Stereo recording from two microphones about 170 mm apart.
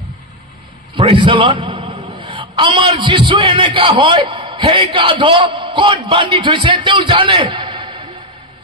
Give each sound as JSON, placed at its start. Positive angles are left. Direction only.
{"t": 0.9, "sound": "a man's voice", "side_deg": -30}